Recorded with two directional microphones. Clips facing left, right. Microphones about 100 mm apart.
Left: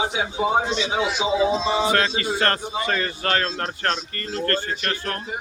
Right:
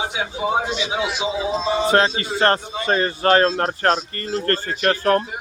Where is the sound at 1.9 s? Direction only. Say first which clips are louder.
Right 4 dB; 30° right (ahead or behind).